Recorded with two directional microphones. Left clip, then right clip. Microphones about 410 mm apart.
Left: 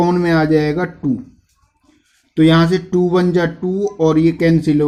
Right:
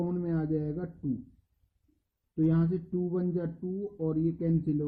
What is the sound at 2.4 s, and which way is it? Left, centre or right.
Speech, centre.